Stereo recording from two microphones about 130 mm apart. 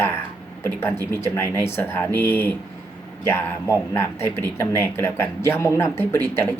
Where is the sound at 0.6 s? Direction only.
20° left (ahead or behind).